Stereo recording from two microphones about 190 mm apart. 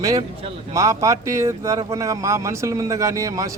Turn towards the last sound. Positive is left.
turn(degrees=-15)  # may be behind; listen again after turning